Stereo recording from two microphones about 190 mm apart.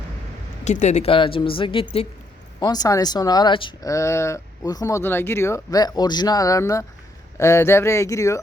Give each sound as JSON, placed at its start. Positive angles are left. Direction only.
{"t": 0.6, "sound": "speech", "side_deg": 35}